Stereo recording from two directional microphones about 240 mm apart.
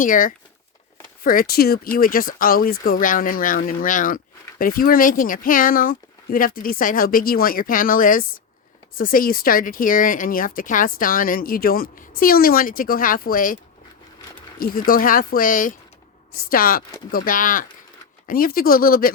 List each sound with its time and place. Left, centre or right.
0.0 s speech: left
14.6 s speech: left